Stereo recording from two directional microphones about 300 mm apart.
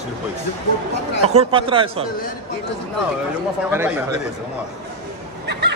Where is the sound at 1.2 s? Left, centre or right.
Centre.